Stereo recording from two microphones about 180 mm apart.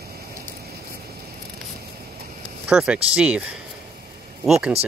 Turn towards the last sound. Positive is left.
turn(degrees=0)  # may be behind; listen again after turning